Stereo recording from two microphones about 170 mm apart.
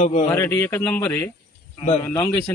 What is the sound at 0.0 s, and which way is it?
Speech, 45° left (ahead or behind).